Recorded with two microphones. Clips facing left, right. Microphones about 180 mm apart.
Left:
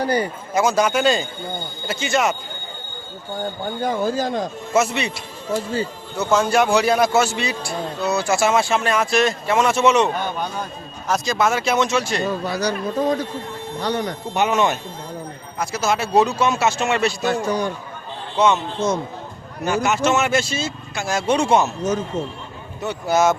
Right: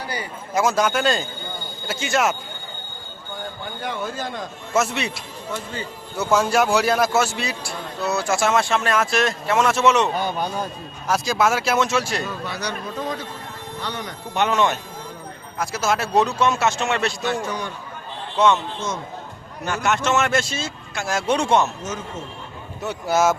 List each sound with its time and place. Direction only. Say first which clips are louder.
0.0 s speech: left 10 dB; 45° left (ahead or behind)
0.5 s a man's voice: left 2 dB; centre (ahead or behind)
3.6 s speech: left 7 dB; 40° left (ahead or behind)
4.7 s a man's voice: left 2 dB; centre (ahead or behind)
5.5 s speech: left 8 dB; 35° left (ahead or behind)
6.1 s a man's voice: left 1 dB; 5° right (ahead or behind)
11.1 s a man's voice: even; 5° right (ahead or behind)
12.5 s speech: left 6 dB; 35° left (ahead or behind)
14.3 s a man's voice: left 1 dB; 5° left (ahead or behind)
17.2 s speech: left 4 dB; 35° left (ahead or behind)
19.6 s a man's voice: left 3 dB; 5° left (ahead or behind)
21.8 s speech: left 8 dB; 35° left (ahead or behind)
22.8 s a man's voice: left 2 dB; 5° right (ahead or behind)